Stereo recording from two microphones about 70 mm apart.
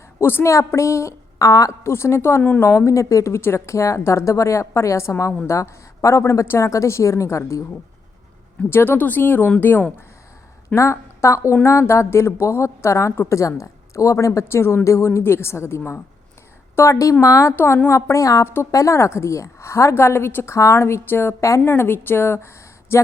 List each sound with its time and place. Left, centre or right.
0.2 s a woman's voice: left
0.5 s a woman's voice: left
1.8 s a woman's voice: left
8.7 s speech: left
10.8 s a woman's voice: left
14.4 s a woman's voice: left